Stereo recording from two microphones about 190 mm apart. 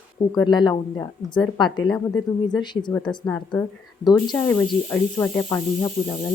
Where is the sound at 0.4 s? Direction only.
25° left (ahead or behind).